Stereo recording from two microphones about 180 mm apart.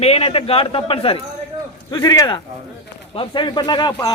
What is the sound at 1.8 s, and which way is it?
Speech, 20° left (ahead or behind).